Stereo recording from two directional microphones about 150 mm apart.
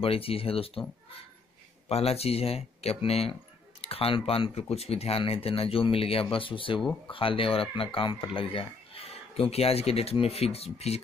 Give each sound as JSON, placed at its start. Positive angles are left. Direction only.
{"t": 0.0, "sound": "speech", "side_deg": 40}
{"t": 1.9, "sound": "speech", "side_deg": 45}